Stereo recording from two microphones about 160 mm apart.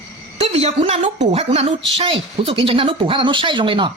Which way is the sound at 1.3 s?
40° right (ahead or behind).